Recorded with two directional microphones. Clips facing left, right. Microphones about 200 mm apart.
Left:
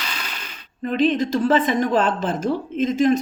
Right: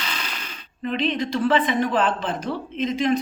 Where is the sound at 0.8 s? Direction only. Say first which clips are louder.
Left 5 dB; 45° left (ahead or behind).